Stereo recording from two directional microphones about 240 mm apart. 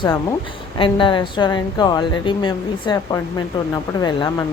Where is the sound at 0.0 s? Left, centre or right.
Centre.